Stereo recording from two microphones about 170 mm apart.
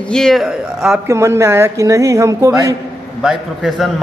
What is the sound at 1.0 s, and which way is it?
Speech, 15° right (ahead or behind).